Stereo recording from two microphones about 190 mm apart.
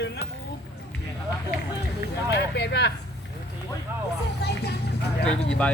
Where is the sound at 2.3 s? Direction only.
60° left (ahead or behind).